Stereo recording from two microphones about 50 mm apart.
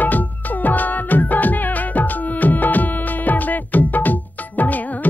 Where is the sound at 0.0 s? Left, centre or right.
Left.